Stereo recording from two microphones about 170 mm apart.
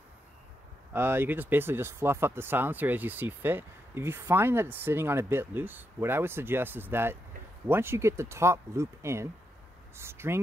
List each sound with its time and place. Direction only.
0.9 s speech: 10° right (ahead or behind)